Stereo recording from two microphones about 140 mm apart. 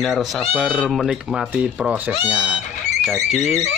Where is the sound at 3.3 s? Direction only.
50° left (ahead or behind).